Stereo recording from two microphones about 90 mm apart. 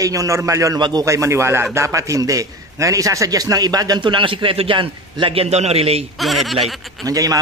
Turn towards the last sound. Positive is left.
turn(degrees=-40)  # may be behind; listen again after turning